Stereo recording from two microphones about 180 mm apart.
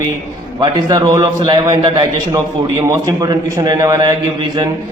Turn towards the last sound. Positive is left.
turn(degrees=-20)  # may be behind; listen again after turning